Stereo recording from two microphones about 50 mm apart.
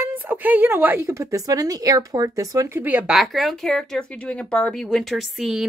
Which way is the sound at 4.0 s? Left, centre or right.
Left.